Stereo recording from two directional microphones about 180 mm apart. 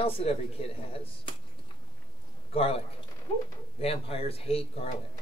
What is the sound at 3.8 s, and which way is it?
Speech, 35° left (ahead or behind).